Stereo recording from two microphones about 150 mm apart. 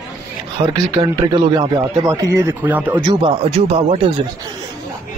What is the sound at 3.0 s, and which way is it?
Speech, 40° right (ahead or behind).